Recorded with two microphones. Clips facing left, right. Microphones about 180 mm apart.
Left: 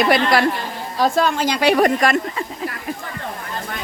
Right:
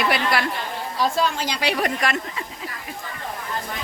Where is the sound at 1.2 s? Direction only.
50° left (ahead or behind).